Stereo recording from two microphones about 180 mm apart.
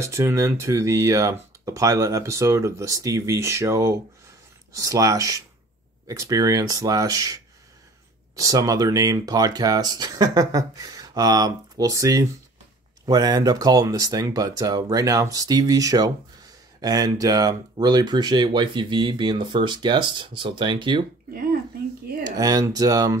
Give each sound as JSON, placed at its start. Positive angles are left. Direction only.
{"t": 0.1, "sound": "speech", "side_deg": -15}
{"t": 21.3, "sound": "speech", "side_deg": -55}
{"t": 22.4, "sound": "speech", "side_deg": -20}